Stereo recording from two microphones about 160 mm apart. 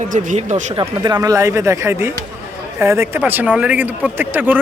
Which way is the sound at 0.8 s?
25° right (ahead or behind).